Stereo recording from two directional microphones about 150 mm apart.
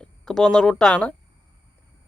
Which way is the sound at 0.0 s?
5° left (ahead or behind).